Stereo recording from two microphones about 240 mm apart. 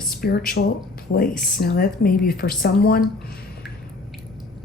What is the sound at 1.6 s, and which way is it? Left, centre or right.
Speech, left.